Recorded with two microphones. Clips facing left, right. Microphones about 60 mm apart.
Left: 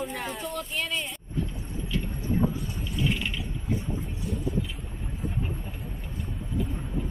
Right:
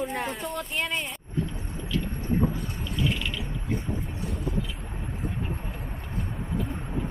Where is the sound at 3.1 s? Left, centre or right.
Centre.